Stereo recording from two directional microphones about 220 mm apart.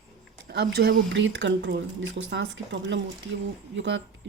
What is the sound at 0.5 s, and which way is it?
Speech, 45° right (ahead or behind).